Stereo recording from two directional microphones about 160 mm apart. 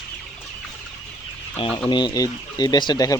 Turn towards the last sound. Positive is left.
turn(degrees=25)  # may be behind; listen again after turning